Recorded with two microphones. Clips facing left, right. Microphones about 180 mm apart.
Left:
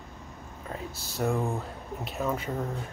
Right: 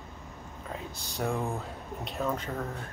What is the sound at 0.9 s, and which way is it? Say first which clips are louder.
Speech: left 3 dB; centre (ahead or behind).